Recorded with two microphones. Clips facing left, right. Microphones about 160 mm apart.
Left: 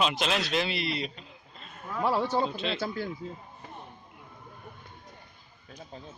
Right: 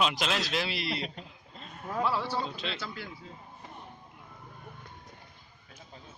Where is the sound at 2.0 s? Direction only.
45° left (ahead or behind).